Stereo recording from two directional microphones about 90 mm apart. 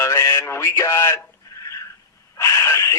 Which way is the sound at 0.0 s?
30° left (ahead or behind).